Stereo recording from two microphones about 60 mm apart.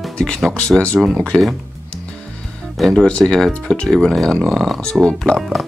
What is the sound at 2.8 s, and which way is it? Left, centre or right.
Speech, centre.